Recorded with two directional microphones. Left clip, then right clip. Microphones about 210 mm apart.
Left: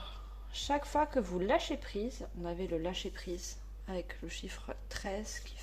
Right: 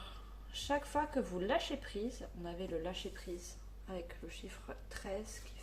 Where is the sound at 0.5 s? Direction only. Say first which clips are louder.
Left 4 dB; 35° left (ahead or behind).